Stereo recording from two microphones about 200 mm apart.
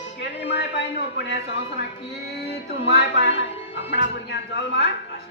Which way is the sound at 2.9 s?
50° left (ahead or behind).